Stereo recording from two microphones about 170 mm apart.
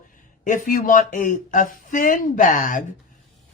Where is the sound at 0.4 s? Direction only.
50° left (ahead or behind).